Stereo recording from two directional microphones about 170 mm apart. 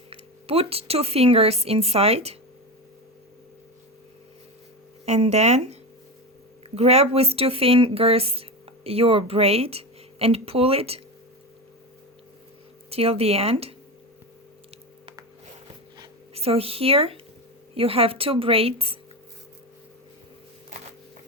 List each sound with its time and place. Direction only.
0.1 s speech: 35° right (ahead or behind)
5.0 s speech: 40° right (ahead or behind)
6.7 s speech: 35° right (ahead or behind)
12.9 s speech: 35° right (ahead or behind)
16.0 s zipper: 35° right (ahead or behind)
17.7 s speech: 35° right (ahead or behind)